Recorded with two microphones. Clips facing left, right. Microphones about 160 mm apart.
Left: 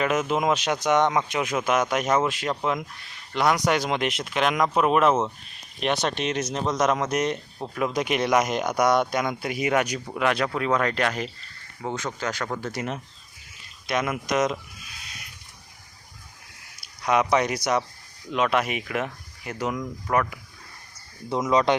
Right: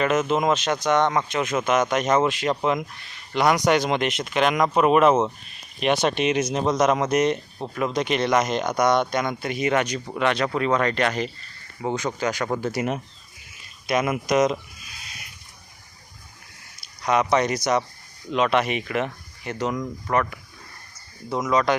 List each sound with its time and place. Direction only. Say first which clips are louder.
0.0 s speech: right 2 dB; 5° left (ahead or behind)
12.0 s speech: right 5 dB; 15° right (ahead or behind)
16.8 s speech: right 1 dB; 5° left (ahead or behind)
21.3 s speech: even; 25° left (ahead or behind)